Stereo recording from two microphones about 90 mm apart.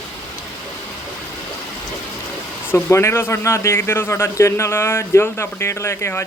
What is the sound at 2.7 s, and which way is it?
Speech, 25° left (ahead or behind).